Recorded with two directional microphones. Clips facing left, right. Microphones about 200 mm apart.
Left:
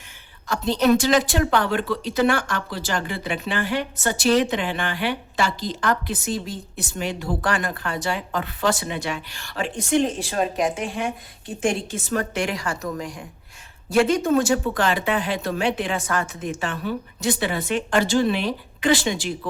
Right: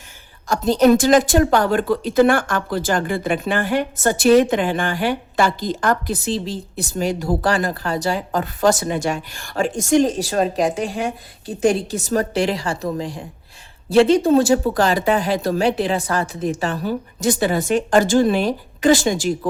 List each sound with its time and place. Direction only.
0.4 s a woman's voice: 45° right (ahead or behind)
6.2 s speech: 30° right (ahead or behind)